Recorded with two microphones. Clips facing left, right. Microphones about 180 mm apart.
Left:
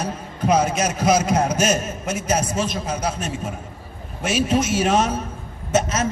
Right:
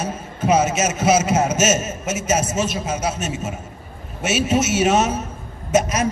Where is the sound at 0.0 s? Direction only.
5° right (ahead or behind).